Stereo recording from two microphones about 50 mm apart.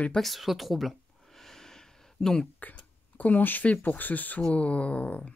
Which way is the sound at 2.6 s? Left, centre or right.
Left.